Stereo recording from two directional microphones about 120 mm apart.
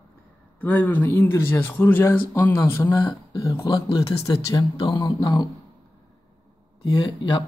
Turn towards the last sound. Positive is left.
turn(degrees=40)  # may be behind; listen again after turning